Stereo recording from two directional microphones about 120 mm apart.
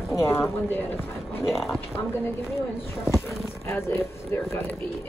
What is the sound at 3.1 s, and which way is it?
Speech, 20° left (ahead or behind).